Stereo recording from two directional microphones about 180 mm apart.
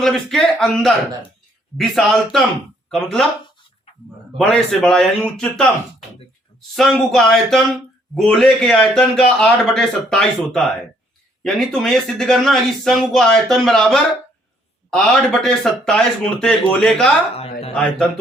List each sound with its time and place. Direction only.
0.0 s a man's voice: centre (ahead or behind)
4.4 s a man's voice: 5° left (ahead or behind)